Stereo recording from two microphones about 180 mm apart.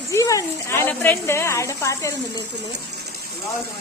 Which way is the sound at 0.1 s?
20° left (ahead or behind).